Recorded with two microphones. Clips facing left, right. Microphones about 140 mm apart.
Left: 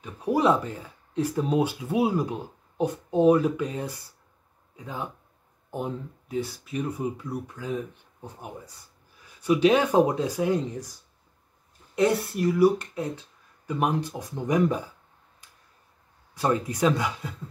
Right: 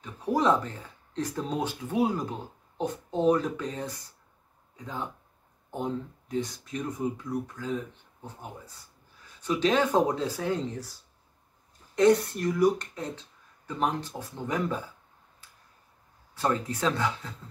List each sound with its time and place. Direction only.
0.0 s speech: 10° left (ahead or behind)
9.2 s speech: 10° left (ahead or behind)
16.3 s speech: 15° left (ahead or behind)